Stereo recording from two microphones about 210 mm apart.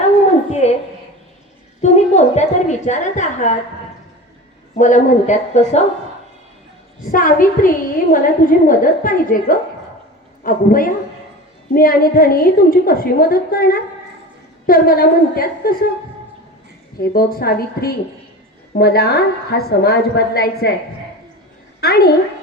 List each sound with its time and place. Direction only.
0.6 s a woman's voice: 35° left (ahead or behind)
1.8 s a woman's voice: 30° left (ahead or behind)
4.7 s a woman's voice: 35° left (ahead or behind)
7.1 s a woman's voice: 40° left (ahead or behind)
17.0 s a woman's voice: 45° left (ahead or behind)
21.8 s a woman's voice: 50° left (ahead or behind)